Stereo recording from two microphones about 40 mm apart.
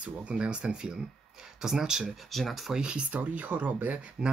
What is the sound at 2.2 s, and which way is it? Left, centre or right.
Speech, centre.